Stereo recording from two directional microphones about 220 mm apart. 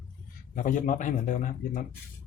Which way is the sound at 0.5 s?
35° left (ahead or behind).